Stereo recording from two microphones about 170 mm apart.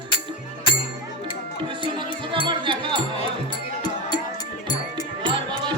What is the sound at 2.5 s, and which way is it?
Music, 30° right (ahead or behind).